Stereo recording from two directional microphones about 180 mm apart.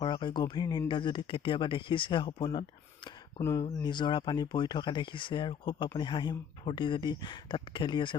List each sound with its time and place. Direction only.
0.0 s speech: 25° left (ahead or behind)